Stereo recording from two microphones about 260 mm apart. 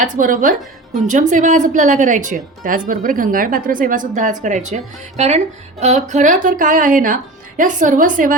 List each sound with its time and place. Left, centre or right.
0.0 s a woman's voice: right